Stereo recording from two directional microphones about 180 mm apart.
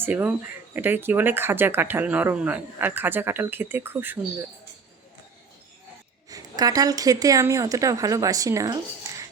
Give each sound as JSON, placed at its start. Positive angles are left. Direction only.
{"t": 0.0, "sound": "speech", "side_deg": -10}
{"t": 6.2, "sound": "speech", "side_deg": -20}